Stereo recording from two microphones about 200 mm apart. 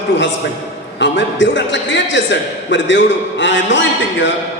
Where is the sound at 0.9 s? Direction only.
65° left (ahead or behind).